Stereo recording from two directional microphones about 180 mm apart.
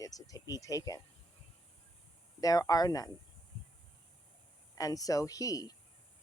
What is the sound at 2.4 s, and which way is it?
Speech, 20° left (ahead or behind).